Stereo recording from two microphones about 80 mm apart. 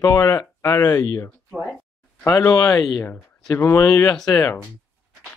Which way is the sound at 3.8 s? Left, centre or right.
Left.